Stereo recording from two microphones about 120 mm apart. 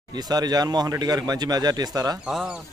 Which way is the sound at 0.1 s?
35° right (ahead or behind).